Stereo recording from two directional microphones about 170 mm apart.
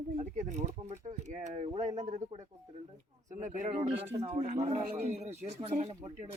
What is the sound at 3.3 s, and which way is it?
Speech, 50° right (ahead or behind).